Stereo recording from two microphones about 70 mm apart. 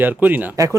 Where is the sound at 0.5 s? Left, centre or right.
Right.